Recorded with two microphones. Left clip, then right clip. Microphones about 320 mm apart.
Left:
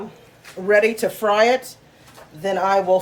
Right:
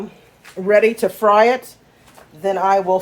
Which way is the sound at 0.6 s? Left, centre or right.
Right.